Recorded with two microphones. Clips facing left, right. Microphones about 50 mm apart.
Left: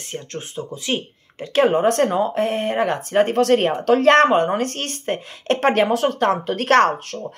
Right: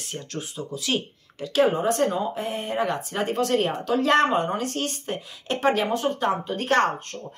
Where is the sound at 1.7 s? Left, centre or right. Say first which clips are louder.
Left 6 dB; left.